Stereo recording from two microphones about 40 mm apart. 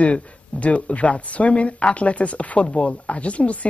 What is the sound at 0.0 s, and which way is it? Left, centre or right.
Speech, left.